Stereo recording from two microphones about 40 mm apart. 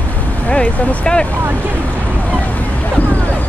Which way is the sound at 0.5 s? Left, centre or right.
Left.